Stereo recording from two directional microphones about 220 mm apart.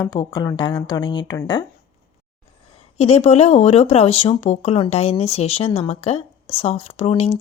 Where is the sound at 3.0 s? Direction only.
30° left (ahead or behind).